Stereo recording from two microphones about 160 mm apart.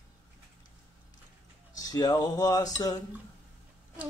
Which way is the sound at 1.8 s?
25° left (ahead or behind).